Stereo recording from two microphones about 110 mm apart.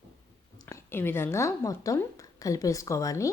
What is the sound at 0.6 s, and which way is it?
A woman's voice, 25° left (ahead or behind).